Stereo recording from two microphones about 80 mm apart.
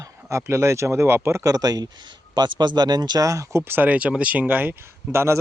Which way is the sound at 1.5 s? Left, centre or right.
Right.